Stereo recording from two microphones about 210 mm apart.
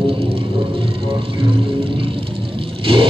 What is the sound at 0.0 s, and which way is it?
Music, 25° right (ahead or behind).